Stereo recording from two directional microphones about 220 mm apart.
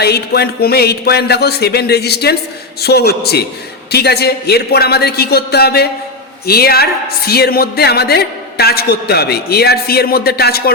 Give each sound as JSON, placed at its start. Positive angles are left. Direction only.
{"t": 0.0, "sound": "speech", "side_deg": 45}